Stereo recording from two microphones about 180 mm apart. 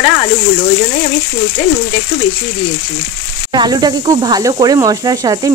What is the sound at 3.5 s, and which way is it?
Sizzle, 25° right (ahead or behind).